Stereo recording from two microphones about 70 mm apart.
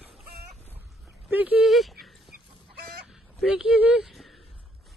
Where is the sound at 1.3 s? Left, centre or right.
Right.